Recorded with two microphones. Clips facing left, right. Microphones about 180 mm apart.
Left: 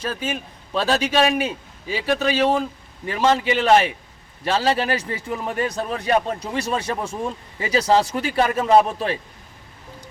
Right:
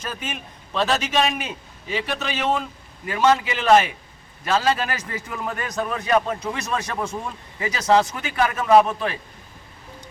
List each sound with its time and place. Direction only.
0.0 s a man's voice: 30° left (ahead or behind)